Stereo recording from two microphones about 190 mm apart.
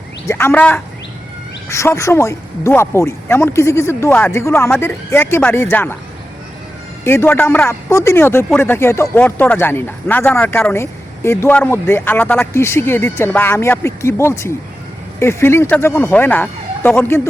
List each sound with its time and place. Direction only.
0.3 s speech: 10° left (ahead or behind)
7.0 s speech: 15° left (ahead or behind)